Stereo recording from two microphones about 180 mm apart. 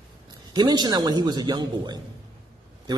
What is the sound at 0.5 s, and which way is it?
A man's voice, 25° right (ahead or behind).